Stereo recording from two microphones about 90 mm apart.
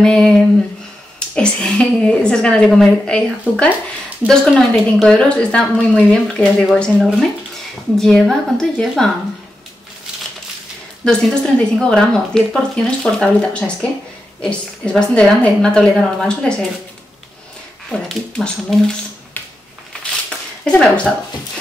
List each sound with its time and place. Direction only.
0.0 s speech: 5° left (ahead or behind)
5.1 s speech: 10° left (ahead or behind)
11.1 s speech: 10° left (ahead or behind)
17.8 s speech: 5° left (ahead or behind)
19.4 s a sound: 20° left (ahead or behind)
20.0 s a sound: 10° left (ahead or behind)